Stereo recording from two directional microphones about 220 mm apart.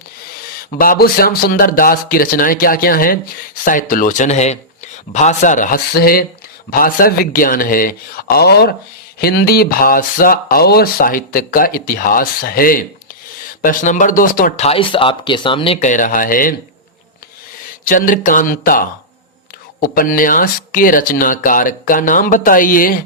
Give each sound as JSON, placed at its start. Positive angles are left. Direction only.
{"t": 0.7, "sound": "speech", "side_deg": 40}
{"t": 17.8, "sound": "speech", "side_deg": 40}